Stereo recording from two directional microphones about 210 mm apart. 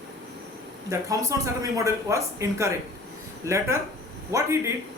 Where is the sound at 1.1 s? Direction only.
15° right (ahead or behind).